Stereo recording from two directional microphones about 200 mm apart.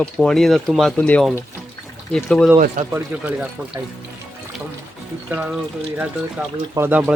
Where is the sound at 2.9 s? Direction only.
5° right (ahead or behind).